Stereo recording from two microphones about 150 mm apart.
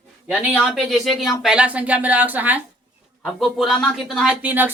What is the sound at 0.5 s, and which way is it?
Speech, centre (ahead or behind).